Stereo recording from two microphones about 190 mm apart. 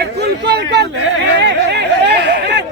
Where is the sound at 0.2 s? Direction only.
60° right (ahead or behind).